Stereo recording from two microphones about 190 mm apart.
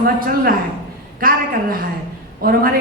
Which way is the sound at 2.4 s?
50° right (ahead or behind).